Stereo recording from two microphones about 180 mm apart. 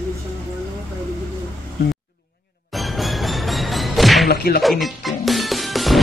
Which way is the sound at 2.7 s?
Centre (ahead or behind).